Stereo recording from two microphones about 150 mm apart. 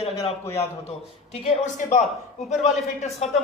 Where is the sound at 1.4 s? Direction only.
40° left (ahead or behind).